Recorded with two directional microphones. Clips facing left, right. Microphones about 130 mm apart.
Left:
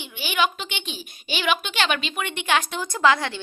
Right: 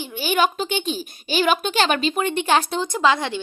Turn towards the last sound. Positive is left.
turn(degrees=-20)  # may be behind; listen again after turning